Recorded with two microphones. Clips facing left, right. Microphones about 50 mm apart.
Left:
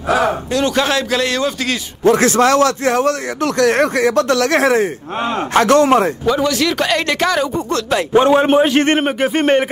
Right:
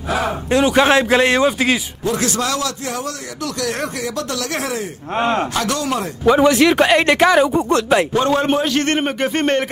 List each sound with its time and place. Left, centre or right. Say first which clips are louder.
0.5 s speech: right 3 dB; right
2.0 s a man's voice: left 9 dB; left
5.1 s speech: right 7 dB; right
5.5 s speech: left 9 dB; left
6.2 s speech: right 4 dB; right
8.1 s a man's voice: left 5 dB; left